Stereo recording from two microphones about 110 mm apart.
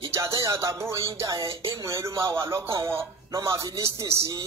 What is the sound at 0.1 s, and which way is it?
Speech, 30° right (ahead or behind).